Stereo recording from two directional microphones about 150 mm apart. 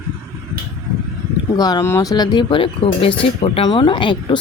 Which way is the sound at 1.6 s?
20° left (ahead or behind).